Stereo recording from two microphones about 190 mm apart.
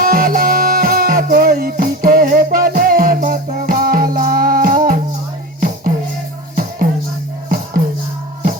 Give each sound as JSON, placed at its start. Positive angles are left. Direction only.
{"t": 0.0, "sound": "music", "side_deg": -50}